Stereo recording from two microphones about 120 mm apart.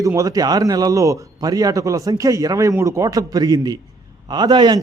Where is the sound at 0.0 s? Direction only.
30° right (ahead or behind).